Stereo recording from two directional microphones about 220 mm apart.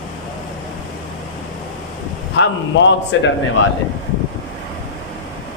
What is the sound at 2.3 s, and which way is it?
Speech, 55° left (ahead or behind).